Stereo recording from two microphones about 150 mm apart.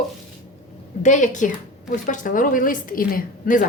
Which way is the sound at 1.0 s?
55° left (ahead or behind).